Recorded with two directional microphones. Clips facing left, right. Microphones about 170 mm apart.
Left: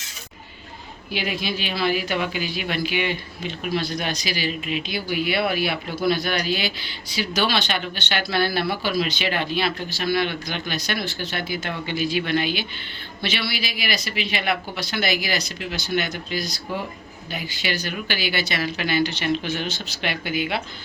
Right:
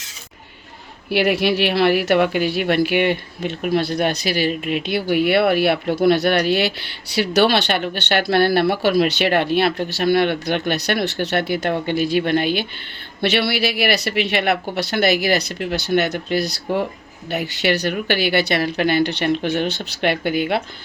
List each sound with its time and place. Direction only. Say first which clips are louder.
1.1 s a woman's voice: right 10 dB; 75° right (ahead or behind); by 12.6 s 55° right (ahead or behind)
13.2 s a woman's voice: right 9 dB; 65° right (ahead or behind)